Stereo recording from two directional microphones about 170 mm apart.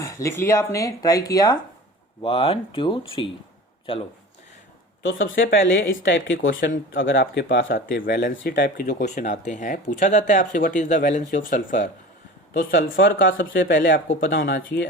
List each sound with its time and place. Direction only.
0.0 s speech: 15° left (ahead or behind)
2.2 s speech: 35° left (ahead or behind)
5.3 s speech: 90° left; by 9.0 s 60° left (ahead or behind)
9.0 s speech: 45° left (ahead or behind)
13.0 s speech: 90° left
13.2 s speech: 55° left (ahead or behind)
13.6 s speech: 75° left (ahead or behind)